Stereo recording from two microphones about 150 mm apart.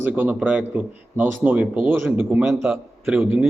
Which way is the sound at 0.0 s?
10° right (ahead or behind).